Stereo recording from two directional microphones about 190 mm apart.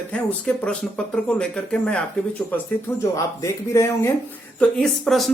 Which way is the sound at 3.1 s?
15° left (ahead or behind).